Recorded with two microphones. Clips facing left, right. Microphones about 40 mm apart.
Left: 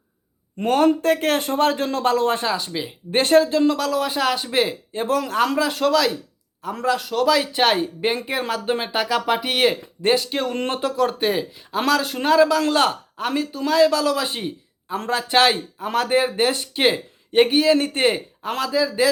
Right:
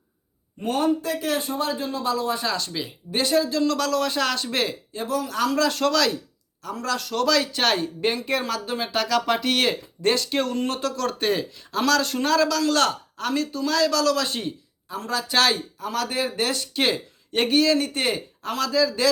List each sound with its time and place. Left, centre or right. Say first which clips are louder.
0.6 s a man's voice: left 6 dB; left
2.5 s speech: left 3 dB; centre
3.1 s speech: left 6 dB; left
3.7 s speech: left 2 dB; centre
4.9 s speech: left 5 dB; left
5.5 s speech: left 2 dB; centre
6.8 s speech: left 4 dB; centre
10.7 s speech: left 5 dB; left
14.9 s speech: left 4 dB; left
15.3 s speech: left 4 dB; left
17.7 s speech: left 5 dB; left